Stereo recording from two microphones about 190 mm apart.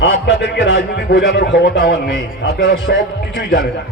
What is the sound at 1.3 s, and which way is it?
Speech, 65° left (ahead or behind).